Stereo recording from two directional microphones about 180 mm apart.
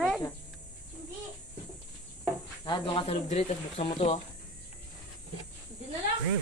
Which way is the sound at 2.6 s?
25° left (ahead or behind).